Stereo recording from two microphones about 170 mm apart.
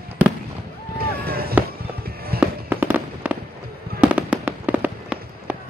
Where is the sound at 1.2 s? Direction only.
65° right (ahead or behind).